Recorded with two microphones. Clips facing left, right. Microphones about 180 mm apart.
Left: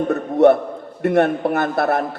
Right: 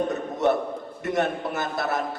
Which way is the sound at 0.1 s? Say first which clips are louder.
Left 10 dB; 60° left (ahead or behind).